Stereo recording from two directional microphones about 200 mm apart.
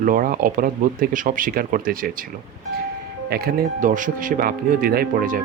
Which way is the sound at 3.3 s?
50° right (ahead or behind).